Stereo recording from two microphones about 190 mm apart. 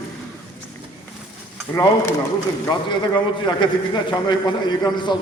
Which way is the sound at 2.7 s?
25° left (ahead or behind).